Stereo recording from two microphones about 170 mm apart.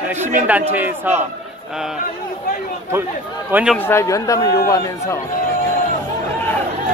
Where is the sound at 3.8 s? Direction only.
15° left (ahead or behind).